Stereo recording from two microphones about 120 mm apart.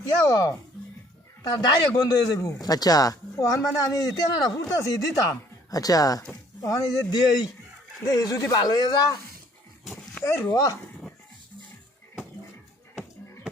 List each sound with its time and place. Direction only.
0.3 s speech: 30° left (ahead or behind)
10.2 s speech: 20° left (ahead or behind)